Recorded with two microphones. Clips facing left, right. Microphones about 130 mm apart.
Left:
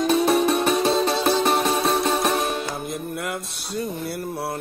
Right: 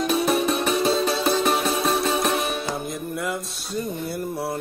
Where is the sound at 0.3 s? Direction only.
Centre (ahead or behind).